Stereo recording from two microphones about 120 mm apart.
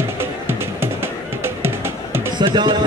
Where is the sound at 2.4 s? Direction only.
40° right (ahead or behind).